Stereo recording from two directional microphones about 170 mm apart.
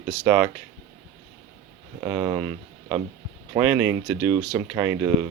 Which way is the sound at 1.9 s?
15° right (ahead or behind).